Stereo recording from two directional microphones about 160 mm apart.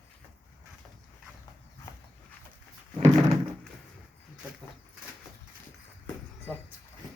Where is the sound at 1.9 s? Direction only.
20° left (ahead or behind).